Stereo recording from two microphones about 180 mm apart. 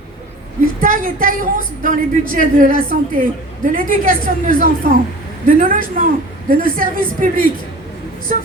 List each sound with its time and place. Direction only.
0.8 s a woman's voice: 50° right (ahead or behind)